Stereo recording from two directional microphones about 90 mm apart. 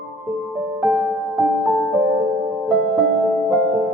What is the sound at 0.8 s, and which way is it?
Music, 15° right (ahead or behind).